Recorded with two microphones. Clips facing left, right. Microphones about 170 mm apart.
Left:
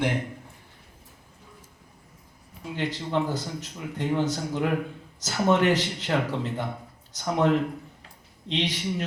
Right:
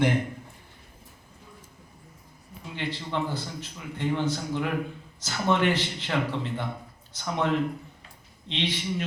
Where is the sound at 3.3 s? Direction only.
40° left (ahead or behind).